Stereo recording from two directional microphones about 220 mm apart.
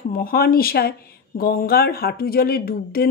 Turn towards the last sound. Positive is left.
turn(degrees=45)  # may be behind; listen again after turning